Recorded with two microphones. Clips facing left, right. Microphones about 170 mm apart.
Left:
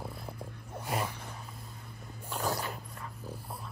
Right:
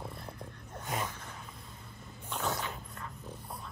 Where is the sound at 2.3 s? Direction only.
Centre (ahead or behind).